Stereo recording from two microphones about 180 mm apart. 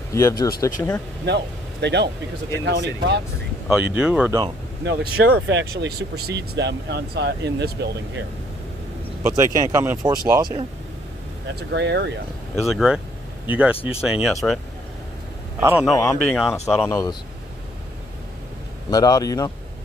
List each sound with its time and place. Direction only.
0.1 s speech: 15° left (ahead or behind)
1.2 s speech: 70° right (ahead or behind)
3.6 s speech: 5° right (ahead or behind)
4.8 s speech: 65° right (ahead or behind)
9.2 s speech: 15° right (ahead or behind)
11.7 s speech: 70° right (ahead or behind)
12.6 s speech: 5° right (ahead or behind)
15.6 s speech: 5° right (ahead or behind)
16.9 s a man's voice: 20° left (ahead or behind)
18.9 s a man's voice: 20° left (ahead or behind)